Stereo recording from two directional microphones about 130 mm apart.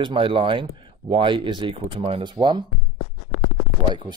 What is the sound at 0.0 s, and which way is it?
Speech, 40° right (ahead or behind).